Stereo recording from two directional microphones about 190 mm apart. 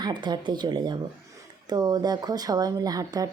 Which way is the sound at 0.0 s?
25° right (ahead or behind).